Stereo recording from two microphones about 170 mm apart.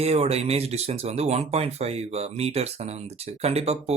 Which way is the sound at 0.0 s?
35° right (ahead or behind).